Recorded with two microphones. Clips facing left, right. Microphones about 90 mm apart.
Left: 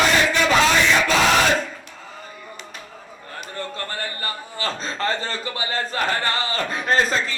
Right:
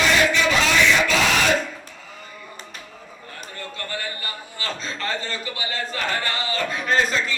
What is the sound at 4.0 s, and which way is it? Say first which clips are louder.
A man's voice: left 3 dB; 40° left (ahead or behind).